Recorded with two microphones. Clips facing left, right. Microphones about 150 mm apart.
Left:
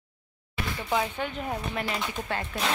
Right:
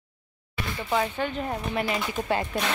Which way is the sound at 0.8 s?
5° left (ahead or behind).